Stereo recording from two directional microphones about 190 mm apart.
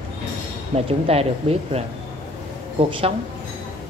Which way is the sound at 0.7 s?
30° right (ahead or behind).